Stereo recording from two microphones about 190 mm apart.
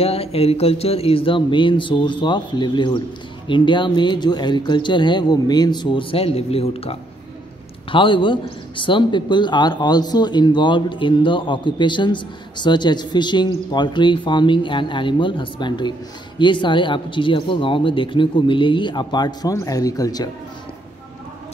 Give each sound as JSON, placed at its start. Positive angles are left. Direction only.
{"t": 0.0, "sound": "a man's voice", "side_deg": 30}